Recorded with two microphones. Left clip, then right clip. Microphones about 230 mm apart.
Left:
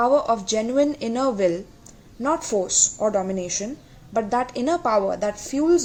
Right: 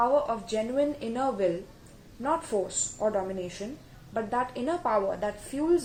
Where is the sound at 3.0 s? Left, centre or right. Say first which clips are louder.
Left 6 dB; left.